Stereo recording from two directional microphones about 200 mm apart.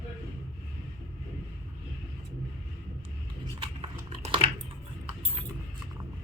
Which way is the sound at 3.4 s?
25° right (ahead or behind).